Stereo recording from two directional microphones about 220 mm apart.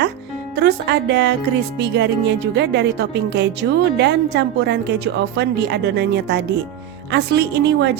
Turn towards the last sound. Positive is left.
turn(degrees=-50)  # may be behind; listen again after turning